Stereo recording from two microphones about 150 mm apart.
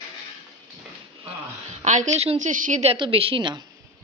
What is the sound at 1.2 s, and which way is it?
A woman's voice, 50° right (ahead or behind).